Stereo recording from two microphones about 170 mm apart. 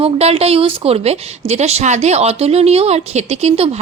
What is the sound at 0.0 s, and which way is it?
A woman's voice, 35° right (ahead or behind).